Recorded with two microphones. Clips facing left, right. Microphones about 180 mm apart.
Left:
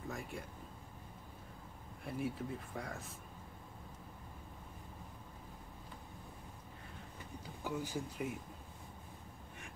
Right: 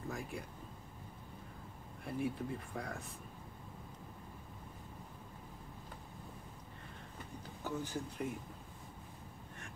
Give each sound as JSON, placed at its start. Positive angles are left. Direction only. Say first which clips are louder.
{"t": 0.1, "sound": "speech", "louder": "right 1 dB", "side_deg": 0}
{"t": 2.0, "sound": "speech", "louder": "right 2 dB", "side_deg": 0}
{"t": 7.6, "sound": "speech", "louder": "even", "side_deg": 10}